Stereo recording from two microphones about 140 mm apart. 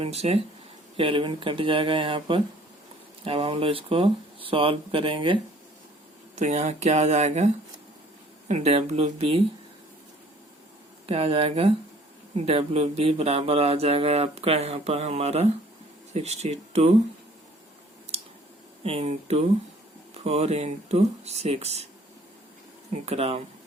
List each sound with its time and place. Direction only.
0.0 s speech: 45° right (ahead or behind)
6.3 s speech: 55° right (ahead or behind)
11.0 s speech: 45° right (ahead or behind)
18.1 s a sound: 50° right (ahead or behind)
18.8 s speech: 45° right (ahead or behind)
23.0 s speech: 50° right (ahead or behind)